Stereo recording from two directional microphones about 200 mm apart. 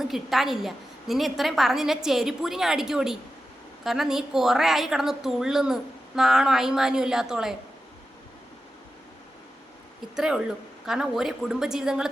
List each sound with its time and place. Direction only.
0.0 s a woman's voice: centre (ahead or behind)
10.2 s a woman's voice: 5° right (ahead or behind)